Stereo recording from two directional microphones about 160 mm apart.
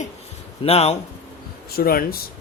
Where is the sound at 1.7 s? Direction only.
70° left (ahead or behind).